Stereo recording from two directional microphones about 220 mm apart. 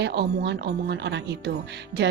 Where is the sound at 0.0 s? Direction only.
50° right (ahead or behind).